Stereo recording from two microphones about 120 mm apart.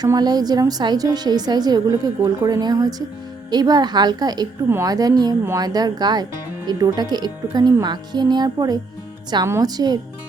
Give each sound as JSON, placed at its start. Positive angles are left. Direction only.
{"t": 0.0, "sound": "a woman's voice", "side_deg": -35}